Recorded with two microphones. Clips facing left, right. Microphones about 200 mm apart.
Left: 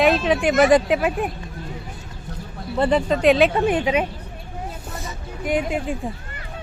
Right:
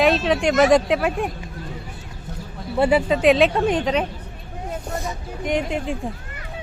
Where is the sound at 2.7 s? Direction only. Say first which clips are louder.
Right 1 dB; 10° right (ahead or behind); by 4.0 s 10° left (ahead or behind).